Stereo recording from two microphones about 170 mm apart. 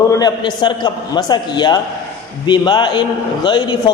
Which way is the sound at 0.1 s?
20° left (ahead or behind).